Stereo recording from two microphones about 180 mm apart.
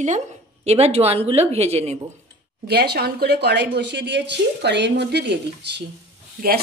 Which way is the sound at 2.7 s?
65° right (ahead or behind).